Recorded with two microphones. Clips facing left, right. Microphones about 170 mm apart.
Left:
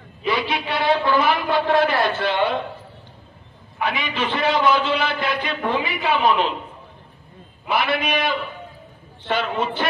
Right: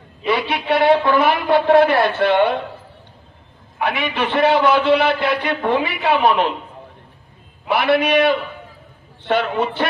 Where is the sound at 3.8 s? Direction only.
65° right (ahead or behind).